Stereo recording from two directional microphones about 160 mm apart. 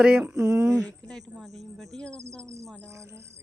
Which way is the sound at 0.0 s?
10° right (ahead or behind).